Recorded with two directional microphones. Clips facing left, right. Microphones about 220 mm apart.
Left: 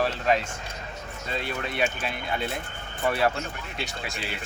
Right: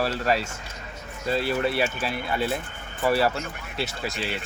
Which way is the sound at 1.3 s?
35° right (ahead or behind).